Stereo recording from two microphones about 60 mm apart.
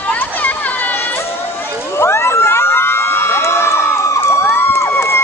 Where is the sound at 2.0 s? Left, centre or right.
Left.